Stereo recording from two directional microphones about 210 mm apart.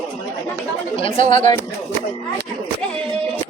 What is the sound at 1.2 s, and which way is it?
Speech, 35° right (ahead or behind).